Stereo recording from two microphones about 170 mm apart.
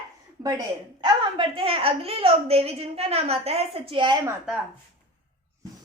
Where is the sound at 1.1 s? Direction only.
30° right (ahead or behind).